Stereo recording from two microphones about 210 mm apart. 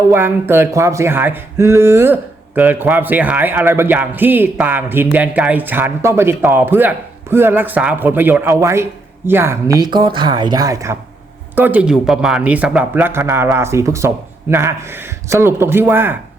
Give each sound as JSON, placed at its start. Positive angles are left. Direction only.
{"t": 0.1, "sound": "a man's voice", "side_deg": -10}